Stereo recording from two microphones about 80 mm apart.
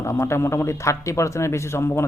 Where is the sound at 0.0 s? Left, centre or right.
Left.